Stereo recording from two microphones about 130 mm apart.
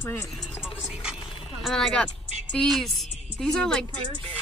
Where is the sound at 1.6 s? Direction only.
Centre (ahead or behind).